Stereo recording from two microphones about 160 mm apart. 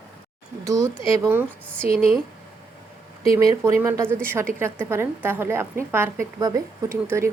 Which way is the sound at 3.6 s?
15° right (ahead or behind).